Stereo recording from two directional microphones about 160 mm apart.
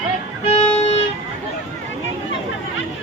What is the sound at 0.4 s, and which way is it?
Music, 40° left (ahead or behind).